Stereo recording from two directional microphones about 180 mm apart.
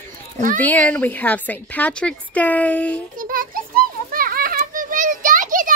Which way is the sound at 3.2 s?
50° right (ahead or behind).